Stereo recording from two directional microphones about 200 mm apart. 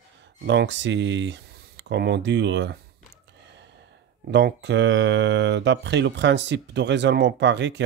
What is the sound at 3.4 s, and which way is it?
Gasp, 60° right (ahead or behind).